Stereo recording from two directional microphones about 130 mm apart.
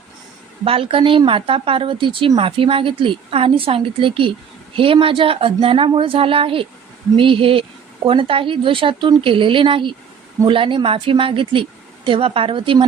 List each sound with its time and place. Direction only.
0.6 s speech: 45° right (ahead or behind)